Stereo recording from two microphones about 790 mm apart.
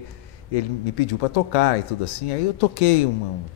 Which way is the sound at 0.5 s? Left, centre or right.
Left.